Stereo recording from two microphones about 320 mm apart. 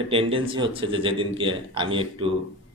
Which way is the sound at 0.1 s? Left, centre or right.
Centre.